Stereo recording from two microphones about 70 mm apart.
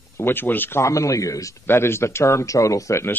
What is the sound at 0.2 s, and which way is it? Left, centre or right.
Speech, left.